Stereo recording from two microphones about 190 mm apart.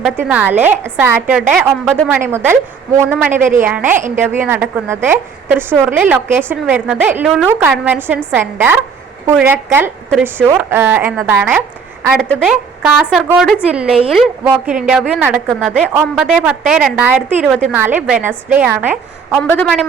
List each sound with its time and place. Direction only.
0.0 s a woman's voice: 5° right (ahead or behind)
2.0 s a woman's voice: 10° right (ahead or behind)
17.4 s a woman's voice: 5° left (ahead or behind)
17.7 s a woman's voice: 10° right (ahead or behind)
19.4 s a woman's voice: 5° left (ahead or behind)